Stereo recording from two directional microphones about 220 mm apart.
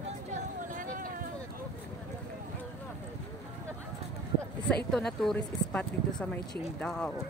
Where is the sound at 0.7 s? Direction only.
40° right (ahead or behind).